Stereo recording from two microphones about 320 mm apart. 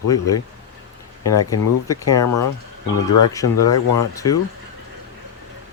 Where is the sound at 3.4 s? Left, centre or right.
Left.